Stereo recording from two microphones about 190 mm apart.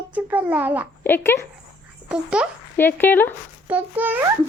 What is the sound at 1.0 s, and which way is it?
Speech, 10° left (ahead or behind).